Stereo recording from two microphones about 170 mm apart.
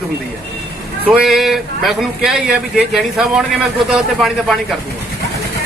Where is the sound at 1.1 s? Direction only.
5° right (ahead or behind).